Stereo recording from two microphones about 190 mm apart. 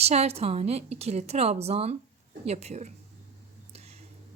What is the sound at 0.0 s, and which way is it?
A woman's voice, 35° right (ahead or behind).